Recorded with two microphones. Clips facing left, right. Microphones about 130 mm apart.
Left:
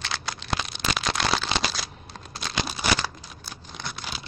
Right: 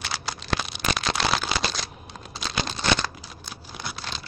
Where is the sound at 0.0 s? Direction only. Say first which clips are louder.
Right 1 dB; 5° right (ahead or behind).